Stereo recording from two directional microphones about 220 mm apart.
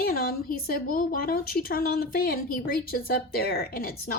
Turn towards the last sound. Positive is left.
turn(degrees=40)  # may be behind; listen again after turning